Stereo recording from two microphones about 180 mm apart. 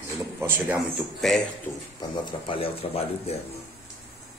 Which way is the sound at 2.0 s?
30° left (ahead or behind).